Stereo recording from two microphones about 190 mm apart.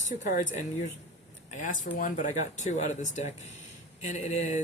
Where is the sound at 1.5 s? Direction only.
45° left (ahead or behind).